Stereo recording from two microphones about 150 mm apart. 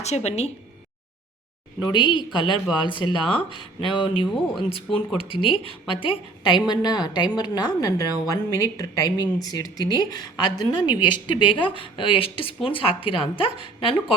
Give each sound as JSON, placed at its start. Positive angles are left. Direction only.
{"t": 0.0, "sound": "speech", "side_deg": 45}
{"t": 1.8, "sound": "a woman's voice", "side_deg": 30}